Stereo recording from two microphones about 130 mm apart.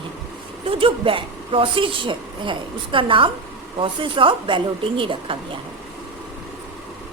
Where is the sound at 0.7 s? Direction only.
45° right (ahead or behind).